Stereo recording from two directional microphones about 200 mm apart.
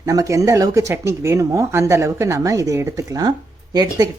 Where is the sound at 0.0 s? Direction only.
15° right (ahead or behind).